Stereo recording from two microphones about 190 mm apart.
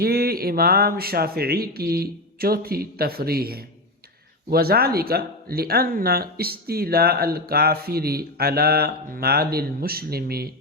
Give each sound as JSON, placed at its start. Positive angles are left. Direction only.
{"t": 0.0, "sound": "speech", "side_deg": -55}